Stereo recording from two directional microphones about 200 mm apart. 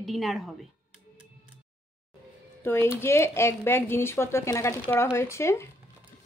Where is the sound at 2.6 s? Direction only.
10° left (ahead or behind).